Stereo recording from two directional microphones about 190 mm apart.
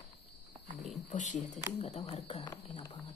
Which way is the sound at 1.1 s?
40° left (ahead or behind).